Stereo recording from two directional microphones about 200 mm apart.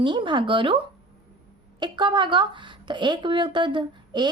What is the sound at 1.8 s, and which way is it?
A woman's voice, 25° right (ahead or behind).